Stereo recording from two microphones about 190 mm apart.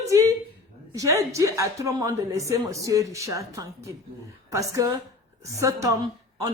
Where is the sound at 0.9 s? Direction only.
15° right (ahead or behind).